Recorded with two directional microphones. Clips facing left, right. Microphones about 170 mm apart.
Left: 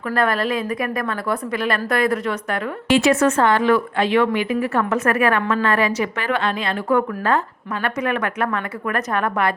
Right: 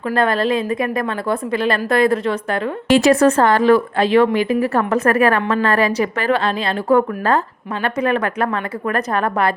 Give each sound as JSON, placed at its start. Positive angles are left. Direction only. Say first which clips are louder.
{"t": 0.1, "sound": "a woman's voice", "louder": "right 3 dB", "side_deg": -25}